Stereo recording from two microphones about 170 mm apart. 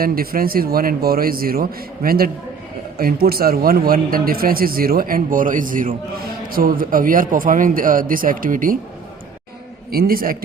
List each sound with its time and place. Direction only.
0.0 s a man's voice: 60° right (ahead or behind)
9.9 s a man's voice: 60° right (ahead or behind)